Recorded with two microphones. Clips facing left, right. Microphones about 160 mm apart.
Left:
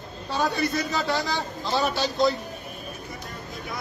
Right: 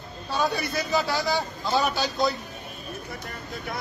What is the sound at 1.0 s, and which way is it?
A man's voice, centre (ahead or behind).